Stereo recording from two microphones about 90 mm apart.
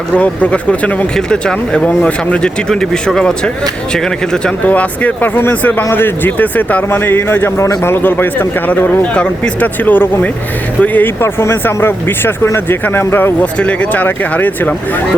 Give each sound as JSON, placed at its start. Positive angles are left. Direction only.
{"t": 0.1, "sound": "speech", "side_deg": 15}